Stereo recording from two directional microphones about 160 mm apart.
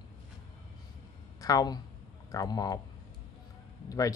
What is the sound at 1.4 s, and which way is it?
Speech, 25° left (ahead or behind).